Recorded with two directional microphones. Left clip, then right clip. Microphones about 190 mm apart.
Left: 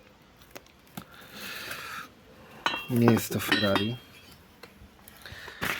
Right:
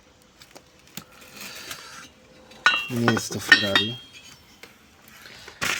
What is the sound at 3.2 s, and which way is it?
Speech, 25° left (ahead or behind).